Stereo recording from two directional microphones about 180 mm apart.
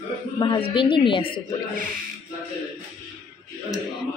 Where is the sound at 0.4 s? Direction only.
25° left (ahead or behind).